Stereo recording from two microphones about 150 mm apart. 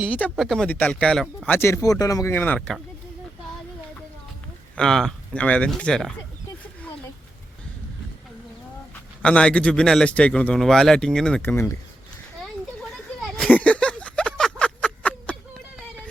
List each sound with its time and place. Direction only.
0.3 s speech: centre (ahead or behind)
1.5 s speech: 15° left (ahead or behind)
4.7 s speech: 5° left (ahead or behind)
9.2 s speech: 5° left (ahead or behind)
11.5 s speech: 15° left (ahead or behind)
13.2 s a sound: centre (ahead or behind)